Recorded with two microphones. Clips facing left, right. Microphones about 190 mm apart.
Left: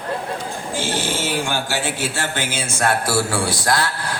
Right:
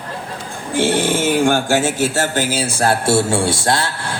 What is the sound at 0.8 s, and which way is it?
Speech, 60° right (ahead or behind).